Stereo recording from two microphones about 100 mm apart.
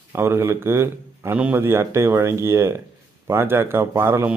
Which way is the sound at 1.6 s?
25° right (ahead or behind).